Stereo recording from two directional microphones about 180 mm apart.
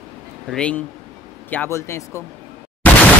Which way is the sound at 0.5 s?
5° left (ahead or behind).